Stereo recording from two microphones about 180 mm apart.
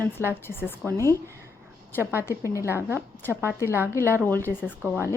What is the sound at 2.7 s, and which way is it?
A woman's voice, 15° right (ahead or behind).